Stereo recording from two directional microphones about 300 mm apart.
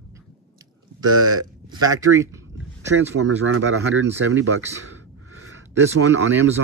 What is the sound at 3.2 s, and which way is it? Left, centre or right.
Speech, right.